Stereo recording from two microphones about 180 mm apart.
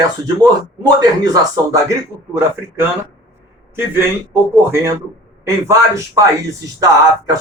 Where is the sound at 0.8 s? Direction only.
20° right (ahead or behind).